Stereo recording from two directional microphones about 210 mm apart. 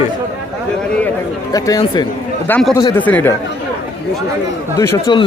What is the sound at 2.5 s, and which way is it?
Speech, 5° left (ahead or behind).